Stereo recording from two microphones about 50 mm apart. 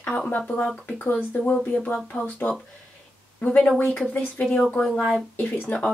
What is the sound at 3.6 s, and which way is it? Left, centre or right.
Speech, left.